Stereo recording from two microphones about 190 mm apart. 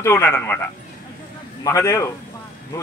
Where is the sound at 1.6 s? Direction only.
15° left (ahead or behind).